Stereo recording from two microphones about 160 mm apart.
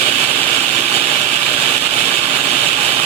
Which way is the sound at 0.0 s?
40° right (ahead or behind).